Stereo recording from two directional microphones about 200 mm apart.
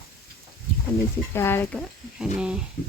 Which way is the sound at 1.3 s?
10° left (ahead or behind).